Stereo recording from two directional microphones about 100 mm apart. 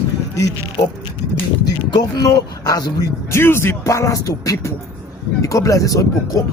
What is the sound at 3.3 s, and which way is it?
Speech, 25° left (ahead or behind).